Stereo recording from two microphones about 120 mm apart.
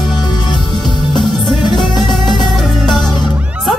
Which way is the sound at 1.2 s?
40° left (ahead or behind).